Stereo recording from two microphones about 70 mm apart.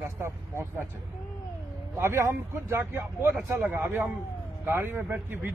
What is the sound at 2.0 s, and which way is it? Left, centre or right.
Speech, right.